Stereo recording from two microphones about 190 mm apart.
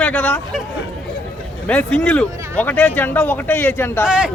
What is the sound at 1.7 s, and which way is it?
Speech, 5° left (ahead or behind).